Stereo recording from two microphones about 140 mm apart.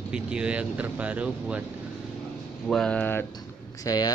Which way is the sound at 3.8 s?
25° left (ahead or behind).